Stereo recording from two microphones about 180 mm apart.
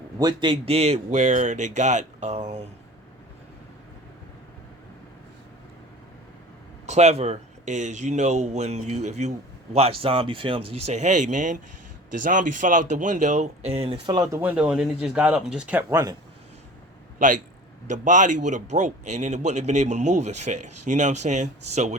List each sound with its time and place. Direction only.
0.2 s a man's voice: 25° right (ahead or behind); by 2.6 s 40° right (ahead or behind)
6.8 s a man's voice: 40° right (ahead or behind)
14.4 s speech: 5° right (ahead or behind)
17.8 s a man's voice: 45° right (ahead or behind)